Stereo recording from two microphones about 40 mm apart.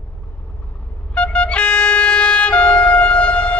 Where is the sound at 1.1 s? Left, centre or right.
Left.